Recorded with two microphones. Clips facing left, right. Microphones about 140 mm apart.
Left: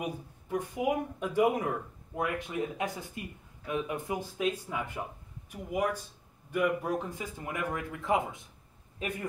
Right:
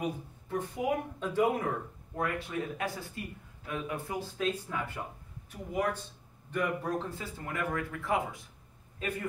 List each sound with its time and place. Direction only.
0.0 s speech: 15° left (ahead or behind)